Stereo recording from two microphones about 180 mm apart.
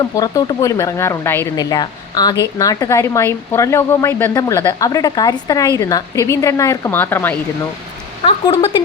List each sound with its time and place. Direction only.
0.0 s speech: 20° left (ahead or behind)
8.2 s a woman's voice: 30° left (ahead or behind)